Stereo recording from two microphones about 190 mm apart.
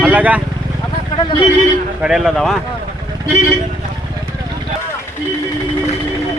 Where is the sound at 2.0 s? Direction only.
5° right (ahead or behind).